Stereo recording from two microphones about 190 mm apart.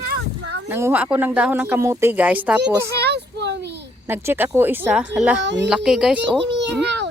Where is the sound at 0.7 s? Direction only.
10° right (ahead or behind).